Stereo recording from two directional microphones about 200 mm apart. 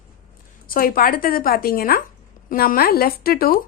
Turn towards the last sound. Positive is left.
turn(degrees=50)  # may be behind; listen again after turning